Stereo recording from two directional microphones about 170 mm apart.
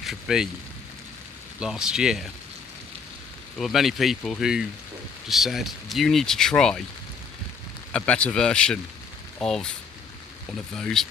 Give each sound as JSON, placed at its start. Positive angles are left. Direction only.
{"t": 0.0, "sound": "speech", "side_deg": 0}
{"t": 1.5, "sound": "speech", "side_deg": -5}
{"t": 3.6, "sound": "speech", "side_deg": 0}
{"t": 7.9, "sound": "speech", "side_deg": 5}
{"t": 10.8, "sound": "speech", "side_deg": 5}